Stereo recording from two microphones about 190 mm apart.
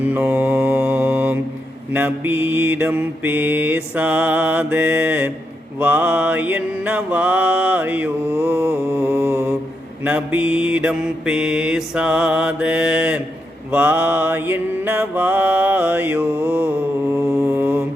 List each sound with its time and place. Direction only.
0.0 s mantra: 10° right (ahead or behind)